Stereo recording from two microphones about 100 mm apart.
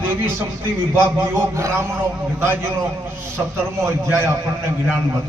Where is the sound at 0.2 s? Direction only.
20° right (ahead or behind).